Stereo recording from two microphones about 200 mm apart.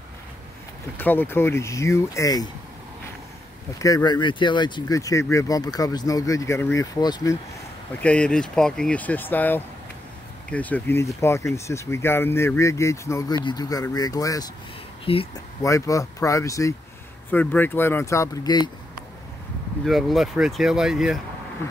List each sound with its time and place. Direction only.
0.9 s speech: 10° left (ahead or behind)
3.8 s speech: 20° left (ahead or behind)
8.0 s speech: 5° left (ahead or behind); by 15.4 s 25° left (ahead or behind)
15.6 s speech: 15° left (ahead or behind)
19.8 s speech: centre (ahead or behind)